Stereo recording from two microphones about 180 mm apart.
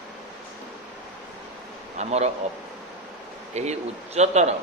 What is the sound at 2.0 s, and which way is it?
Speech, 35° right (ahead or behind).